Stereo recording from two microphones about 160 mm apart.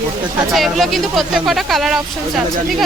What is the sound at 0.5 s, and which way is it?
Speech, centre (ahead or behind).